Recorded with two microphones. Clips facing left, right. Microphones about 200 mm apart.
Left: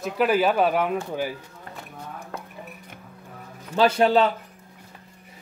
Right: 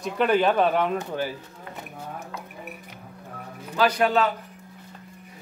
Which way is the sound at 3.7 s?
25° left (ahead or behind).